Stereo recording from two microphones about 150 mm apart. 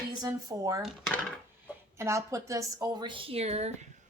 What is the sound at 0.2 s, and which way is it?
Speech, 25° right (ahead or behind).